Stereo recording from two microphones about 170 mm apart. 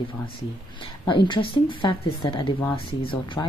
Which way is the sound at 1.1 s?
30° left (ahead or behind).